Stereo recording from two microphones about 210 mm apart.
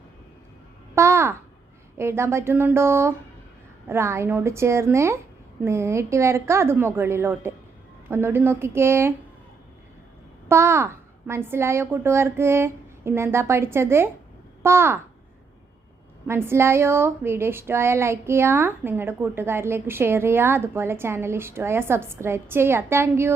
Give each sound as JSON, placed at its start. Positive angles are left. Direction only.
{"t": 0.9, "sound": "babbling", "side_deg": -10}
{"t": 2.0, "sound": "a woman's voice", "side_deg": -10}
{"t": 10.5, "sound": "a woman's voice", "side_deg": -10}
{"t": 16.2, "sound": "a woman's voice", "side_deg": -10}